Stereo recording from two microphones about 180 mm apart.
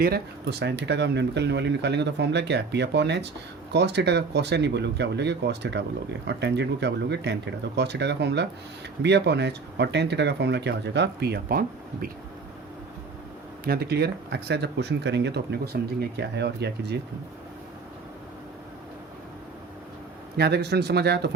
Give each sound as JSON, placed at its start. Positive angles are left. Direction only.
{"t": 0.0, "sound": "speech", "side_deg": -65}
{"t": 13.7, "sound": "speech", "side_deg": -60}
{"t": 20.3, "sound": "speech", "side_deg": -65}